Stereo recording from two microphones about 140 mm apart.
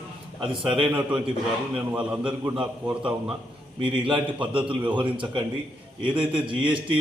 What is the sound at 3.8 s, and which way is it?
A man's voice, 40° right (ahead or behind).